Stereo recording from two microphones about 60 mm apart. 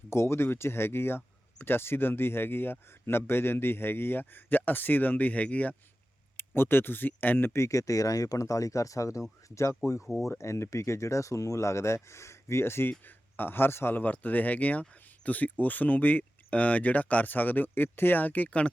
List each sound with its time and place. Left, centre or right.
0.1 s speech: left
6.3 s speech: left
7.5 s speech: left